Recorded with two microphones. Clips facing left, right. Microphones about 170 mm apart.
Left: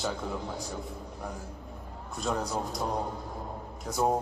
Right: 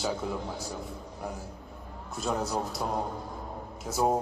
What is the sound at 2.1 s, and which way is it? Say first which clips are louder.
Speech: right 1 dB; 5° right (ahead or behind).